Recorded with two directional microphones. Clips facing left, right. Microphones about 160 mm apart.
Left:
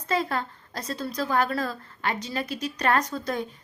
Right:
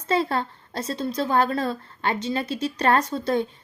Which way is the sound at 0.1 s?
30° right (ahead or behind).